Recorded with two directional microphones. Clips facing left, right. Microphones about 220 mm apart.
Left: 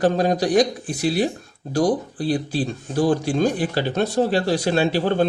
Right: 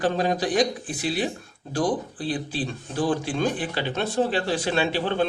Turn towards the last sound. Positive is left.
turn(degrees=40)  # may be behind; listen again after turning